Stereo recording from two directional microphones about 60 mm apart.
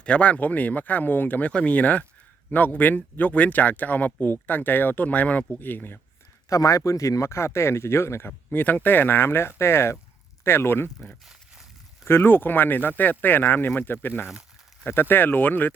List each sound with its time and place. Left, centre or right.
0.0 s speech: centre
6.5 s speech: left
8.5 s speech: left
12.0 s speech: left